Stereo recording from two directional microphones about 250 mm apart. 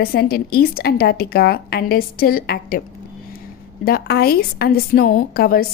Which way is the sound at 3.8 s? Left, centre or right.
Left.